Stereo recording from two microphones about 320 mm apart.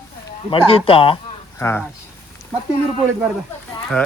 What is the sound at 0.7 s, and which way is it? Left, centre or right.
Speech, centre.